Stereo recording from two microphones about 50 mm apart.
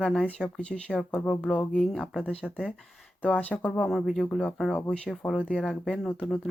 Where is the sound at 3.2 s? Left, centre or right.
Left.